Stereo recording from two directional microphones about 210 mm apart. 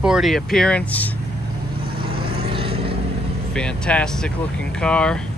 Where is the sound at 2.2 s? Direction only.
25° right (ahead or behind).